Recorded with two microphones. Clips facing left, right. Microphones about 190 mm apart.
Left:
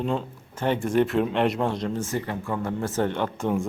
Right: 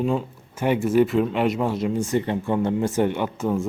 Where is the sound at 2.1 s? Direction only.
25° right (ahead or behind).